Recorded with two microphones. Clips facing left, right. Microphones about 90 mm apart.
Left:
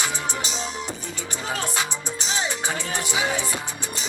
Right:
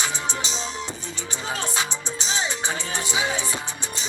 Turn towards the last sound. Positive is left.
turn(degrees=-25)  # may be behind; listen again after turning